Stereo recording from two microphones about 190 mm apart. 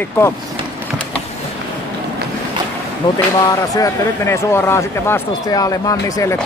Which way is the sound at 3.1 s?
20° left (ahead or behind).